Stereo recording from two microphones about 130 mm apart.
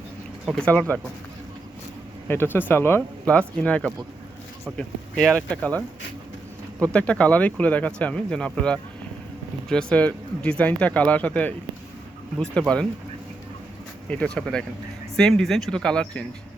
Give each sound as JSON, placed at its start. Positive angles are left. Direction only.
{"t": 0.6, "sound": "speech", "side_deg": 10}
{"t": 2.2, "sound": "speech", "side_deg": 15}
{"t": 6.9, "sound": "speech", "side_deg": 10}
{"t": 14.1, "sound": "speech", "side_deg": 10}